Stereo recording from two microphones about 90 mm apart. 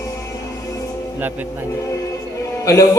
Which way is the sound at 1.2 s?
20° right (ahead or behind).